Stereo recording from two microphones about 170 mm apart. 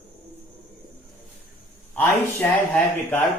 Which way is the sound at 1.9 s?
10° left (ahead or behind).